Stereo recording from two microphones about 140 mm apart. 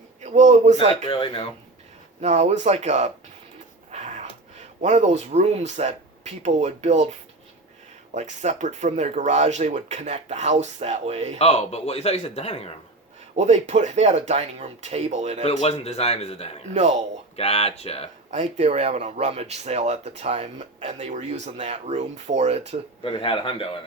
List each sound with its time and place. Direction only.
0.2 s speech: 55° right (ahead or behind)
1.0 s a man's voice: 40° left (ahead or behind)
2.2 s speech: 50° right (ahead or behind)
3.9 s a sound: 55° right (ahead or behind)
4.8 s speech: 55° right (ahead or behind)
8.1 s speech: 55° right (ahead or behind)
11.3 s speech: 50° left (ahead or behind)
13.3 s speech: 55° right (ahead or behind)
15.4 s speech: 50° left (ahead or behind)
18.3 s speech: 50° right (ahead or behind)
23.0 s a man's voice: 35° left (ahead or behind)